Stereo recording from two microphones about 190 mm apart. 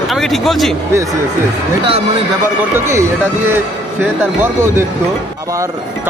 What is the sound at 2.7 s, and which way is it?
Speech, 15° right (ahead or behind).